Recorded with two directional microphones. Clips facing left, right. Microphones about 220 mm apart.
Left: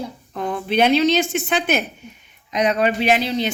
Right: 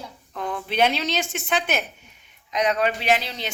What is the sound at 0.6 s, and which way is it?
A woman's voice, centre (ahead or behind).